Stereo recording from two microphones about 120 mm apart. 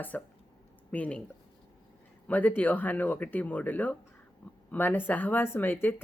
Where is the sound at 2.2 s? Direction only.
15° left (ahead or behind).